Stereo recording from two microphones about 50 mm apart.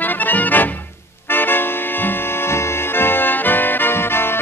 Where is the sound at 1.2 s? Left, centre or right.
Left.